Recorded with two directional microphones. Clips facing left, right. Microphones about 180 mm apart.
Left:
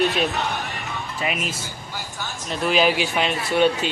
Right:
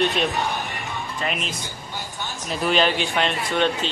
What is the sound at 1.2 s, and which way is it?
Speech, 5° left (ahead or behind).